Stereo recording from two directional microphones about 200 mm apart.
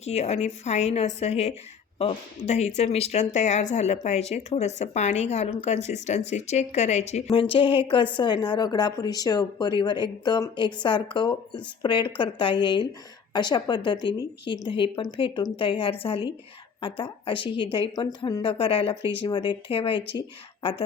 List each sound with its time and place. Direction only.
0.0 s a woman's voice: 30° left (ahead or behind)